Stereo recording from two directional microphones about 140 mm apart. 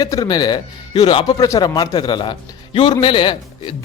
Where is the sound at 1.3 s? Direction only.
25° left (ahead or behind).